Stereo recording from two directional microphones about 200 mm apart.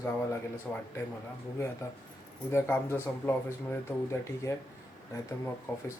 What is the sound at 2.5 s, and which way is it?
Speech, 10° left (ahead or behind).